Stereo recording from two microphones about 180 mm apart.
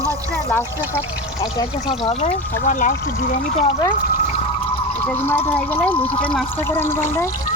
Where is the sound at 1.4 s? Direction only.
25° left (ahead or behind).